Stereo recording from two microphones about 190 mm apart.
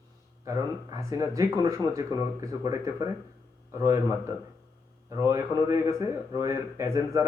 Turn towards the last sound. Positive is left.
turn(degrees=-15)  # may be behind; listen again after turning